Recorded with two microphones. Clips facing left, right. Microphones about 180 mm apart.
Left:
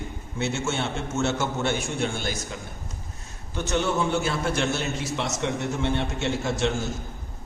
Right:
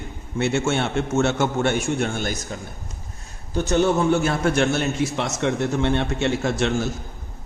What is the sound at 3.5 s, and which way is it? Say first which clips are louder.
A man's voice: right 6 dB; 40° right (ahead or behind).